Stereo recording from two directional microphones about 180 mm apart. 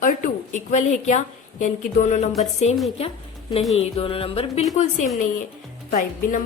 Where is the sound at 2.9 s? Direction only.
30° left (ahead or behind); by 6.4 s 45° left (ahead or behind).